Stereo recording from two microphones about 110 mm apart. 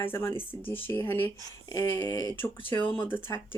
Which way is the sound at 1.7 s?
30° left (ahead or behind).